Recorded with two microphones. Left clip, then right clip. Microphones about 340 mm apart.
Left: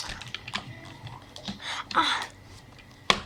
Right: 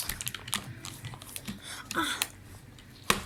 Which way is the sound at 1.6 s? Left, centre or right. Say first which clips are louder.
Left 7 dB; centre.